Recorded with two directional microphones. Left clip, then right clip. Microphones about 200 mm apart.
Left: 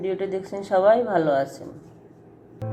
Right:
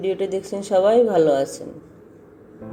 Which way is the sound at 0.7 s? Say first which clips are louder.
Right 2 dB; 25° right (ahead or behind).